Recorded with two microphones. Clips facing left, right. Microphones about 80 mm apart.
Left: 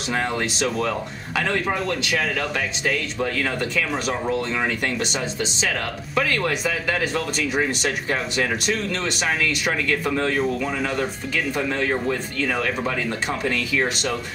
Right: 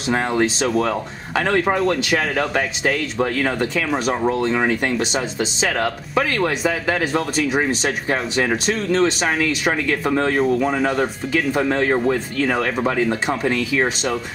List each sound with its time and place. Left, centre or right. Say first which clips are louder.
0.8 s speech: right 3 dB; right
1.5 s speech: right 8 dB; right
4.5 s speech: right 5 dB; right
6.2 s speech: right 4 dB; centre
7.2 s speech: right 4 dB; right
10.6 s speech: right 5 dB; right
12.4 s speech: right 4 dB; right